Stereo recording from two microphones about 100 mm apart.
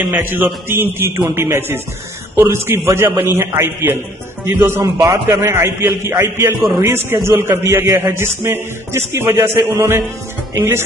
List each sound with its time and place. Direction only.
0.1 s speech: 20° right (ahead or behind)